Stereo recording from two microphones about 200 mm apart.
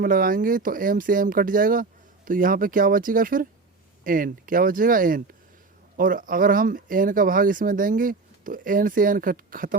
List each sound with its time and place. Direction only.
0.0 s speech: 45° right (ahead or behind)